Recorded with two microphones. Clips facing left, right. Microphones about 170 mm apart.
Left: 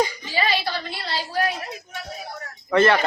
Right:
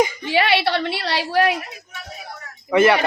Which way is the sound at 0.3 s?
70° right (ahead or behind).